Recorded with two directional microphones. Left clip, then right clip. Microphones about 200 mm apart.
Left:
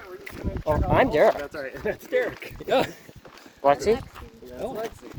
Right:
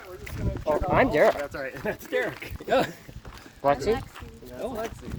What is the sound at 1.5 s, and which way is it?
Speech, 30° right (ahead or behind).